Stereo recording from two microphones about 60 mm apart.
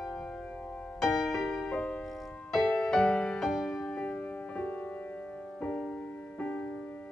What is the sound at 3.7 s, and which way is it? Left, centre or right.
Music, centre.